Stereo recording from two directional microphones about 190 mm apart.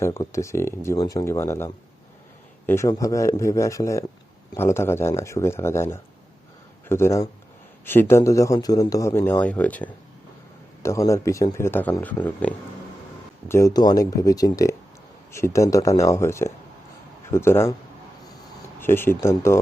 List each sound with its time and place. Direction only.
0.0 s a man's voice: 15° left (ahead or behind)
18.8 s a man's voice: 10° left (ahead or behind)